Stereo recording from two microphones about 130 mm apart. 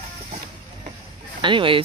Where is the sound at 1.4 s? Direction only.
40° right (ahead or behind).